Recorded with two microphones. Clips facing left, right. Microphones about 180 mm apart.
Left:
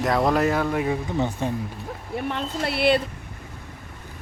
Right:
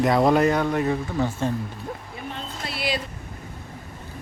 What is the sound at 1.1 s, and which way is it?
Speech, 20° left (ahead or behind).